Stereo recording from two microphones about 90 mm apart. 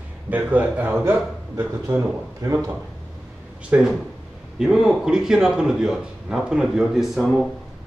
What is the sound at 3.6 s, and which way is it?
A man's voice, 15° right (ahead or behind).